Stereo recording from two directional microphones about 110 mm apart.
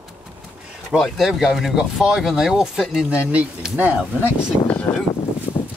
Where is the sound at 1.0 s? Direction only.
5° right (ahead or behind).